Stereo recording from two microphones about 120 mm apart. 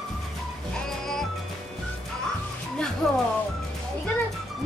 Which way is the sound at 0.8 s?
5° left (ahead or behind).